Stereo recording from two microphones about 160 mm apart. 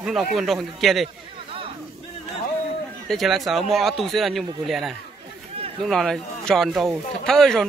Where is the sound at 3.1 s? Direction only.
Centre (ahead or behind).